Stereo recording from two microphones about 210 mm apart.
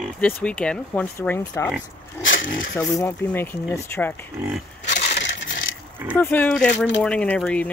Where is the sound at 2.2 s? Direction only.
65° left (ahead or behind).